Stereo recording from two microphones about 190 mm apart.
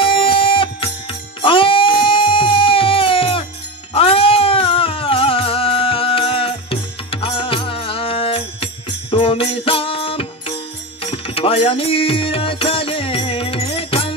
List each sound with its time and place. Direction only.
0.0 s music: 25° left (ahead or behind)